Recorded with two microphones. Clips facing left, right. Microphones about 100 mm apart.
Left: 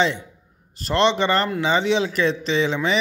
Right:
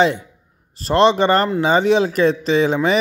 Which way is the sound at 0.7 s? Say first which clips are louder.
Right 5 dB; 40° right (ahead or behind).